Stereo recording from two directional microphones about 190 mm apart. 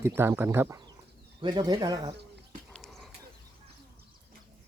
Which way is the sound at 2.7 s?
5° left (ahead or behind).